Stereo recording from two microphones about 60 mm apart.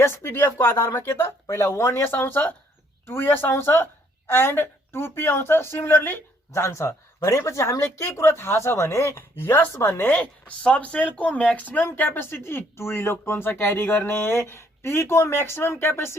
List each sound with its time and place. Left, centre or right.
0.0 s speech: left
6.5 s speech: left
10.1 s speech: left